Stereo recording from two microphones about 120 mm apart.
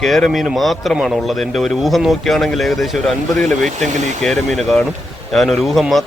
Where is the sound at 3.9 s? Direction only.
80° right.